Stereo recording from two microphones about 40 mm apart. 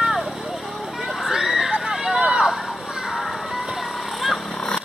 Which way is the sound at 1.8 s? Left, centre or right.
Centre.